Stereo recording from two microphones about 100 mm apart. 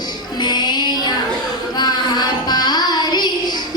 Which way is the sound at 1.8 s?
45° left (ahead or behind).